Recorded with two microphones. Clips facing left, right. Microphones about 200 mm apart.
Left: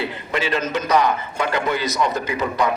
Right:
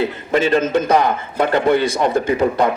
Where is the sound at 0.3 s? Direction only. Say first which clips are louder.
Right 8 dB; 50° right (ahead or behind).